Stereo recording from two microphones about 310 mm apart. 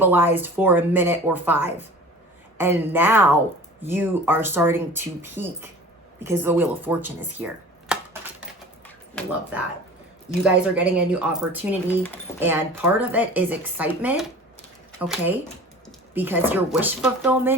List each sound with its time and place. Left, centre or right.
0.0 s speech: centre
10.4 s speech: centre